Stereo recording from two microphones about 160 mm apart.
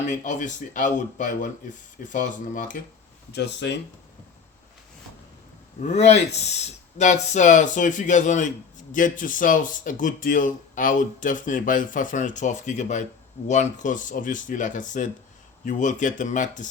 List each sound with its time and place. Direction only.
0.0 s speech: 50° left (ahead or behind)
3.3 s speech: 90° left
5.8 s speech: 40° left (ahead or behind)